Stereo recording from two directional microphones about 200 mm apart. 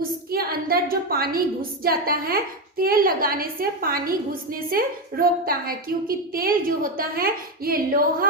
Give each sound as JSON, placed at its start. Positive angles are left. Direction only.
{"t": 0.3, "sound": "a woman's voice", "side_deg": -50}